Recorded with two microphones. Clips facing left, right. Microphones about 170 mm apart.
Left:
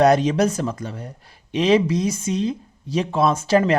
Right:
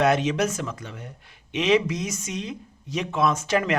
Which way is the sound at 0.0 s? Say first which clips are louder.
Left 5 dB; 40° left (ahead or behind).